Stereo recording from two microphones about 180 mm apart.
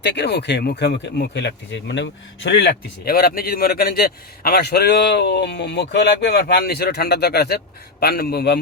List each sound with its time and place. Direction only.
0.0 s speech: 70° left (ahead or behind)